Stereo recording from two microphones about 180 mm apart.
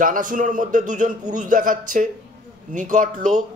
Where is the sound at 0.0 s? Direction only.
50° right (ahead or behind).